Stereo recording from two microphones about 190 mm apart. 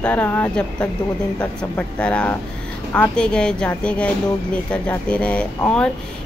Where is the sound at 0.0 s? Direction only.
10° left (ahead or behind).